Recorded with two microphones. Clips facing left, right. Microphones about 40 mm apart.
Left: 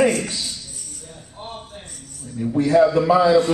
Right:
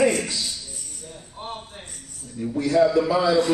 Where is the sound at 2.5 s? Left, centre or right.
Left.